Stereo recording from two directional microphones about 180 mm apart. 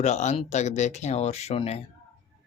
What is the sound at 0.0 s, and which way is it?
Speech, 40° left (ahead or behind).